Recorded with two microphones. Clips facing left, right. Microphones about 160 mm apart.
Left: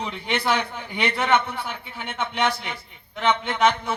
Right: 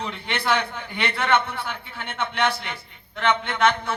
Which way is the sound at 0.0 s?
15° left (ahead or behind).